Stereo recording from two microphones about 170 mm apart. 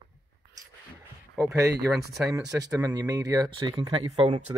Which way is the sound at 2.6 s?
20° right (ahead or behind).